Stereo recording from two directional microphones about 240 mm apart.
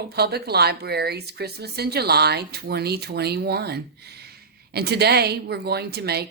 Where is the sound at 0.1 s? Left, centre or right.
Right.